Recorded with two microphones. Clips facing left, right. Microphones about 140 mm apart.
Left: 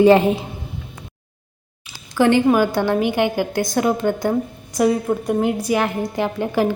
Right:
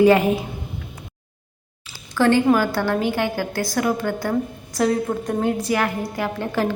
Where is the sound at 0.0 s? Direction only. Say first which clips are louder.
Left 2 dB; 25° left (ahead or behind).